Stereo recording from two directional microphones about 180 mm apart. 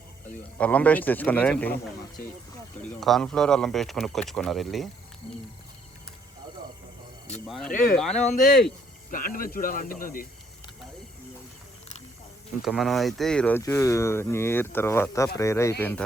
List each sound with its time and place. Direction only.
0.3 s speech: 10° left (ahead or behind)
2.9 s speech: centre (ahead or behind)
7.3 s speech: centre (ahead or behind)
8.1 s speech: 40° left (ahead or behind)
9.0 s speech: 50° left (ahead or behind)
12.6 s speech: centre (ahead or behind)
13.6 s speech: 15° left (ahead or behind)